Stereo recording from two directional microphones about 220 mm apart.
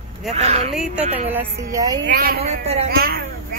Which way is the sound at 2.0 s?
45° right (ahead or behind).